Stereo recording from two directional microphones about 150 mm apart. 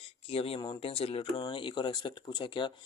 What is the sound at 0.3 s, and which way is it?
Speech, 40° left (ahead or behind).